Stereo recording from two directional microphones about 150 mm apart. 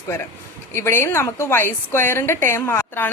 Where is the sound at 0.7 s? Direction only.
15° left (ahead or behind).